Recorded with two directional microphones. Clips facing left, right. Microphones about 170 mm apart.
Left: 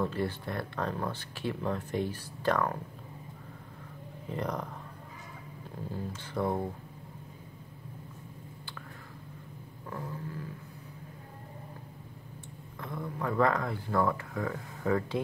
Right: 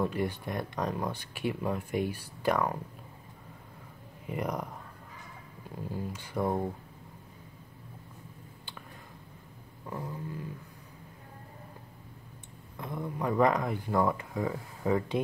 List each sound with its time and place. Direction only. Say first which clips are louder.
0.0 s speech: right 1 dB; 15° right (ahead or behind)
4.3 s speech: right 1 dB; 10° right (ahead or behind)
5.9 s speech: right 1 dB; 10° right (ahead or behind)
9.8 s a sound: right 1 dB; 15° right (ahead or behind)
12.7 s speech: right 2 dB; 20° right (ahead or behind)